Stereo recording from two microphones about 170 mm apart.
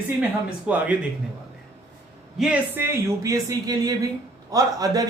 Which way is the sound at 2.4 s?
10° right (ahead or behind).